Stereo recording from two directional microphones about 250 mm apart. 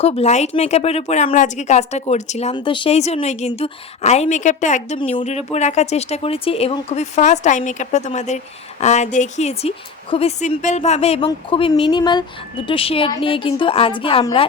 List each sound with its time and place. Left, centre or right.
0.0 s speech: left